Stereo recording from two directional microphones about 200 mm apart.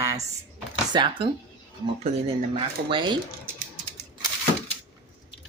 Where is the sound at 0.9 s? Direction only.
25° right (ahead or behind).